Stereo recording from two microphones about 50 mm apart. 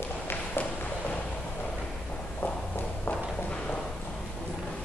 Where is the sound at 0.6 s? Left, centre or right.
Left.